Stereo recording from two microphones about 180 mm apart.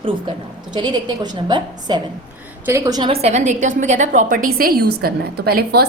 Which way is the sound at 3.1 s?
35° right (ahead or behind).